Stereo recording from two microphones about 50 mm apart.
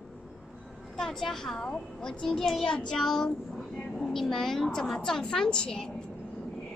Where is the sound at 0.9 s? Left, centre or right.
Centre.